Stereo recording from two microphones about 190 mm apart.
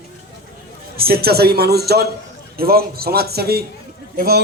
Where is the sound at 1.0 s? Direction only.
55° right (ahead or behind).